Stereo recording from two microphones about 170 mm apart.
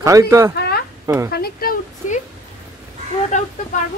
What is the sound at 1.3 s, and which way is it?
Speech, 65° left (ahead or behind).